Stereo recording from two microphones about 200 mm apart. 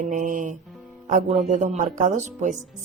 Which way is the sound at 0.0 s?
40° right (ahead or behind).